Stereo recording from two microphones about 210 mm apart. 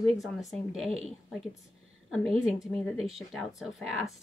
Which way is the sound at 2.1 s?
Centre (ahead or behind).